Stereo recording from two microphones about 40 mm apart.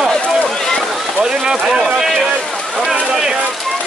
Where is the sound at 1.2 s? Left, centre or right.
Centre.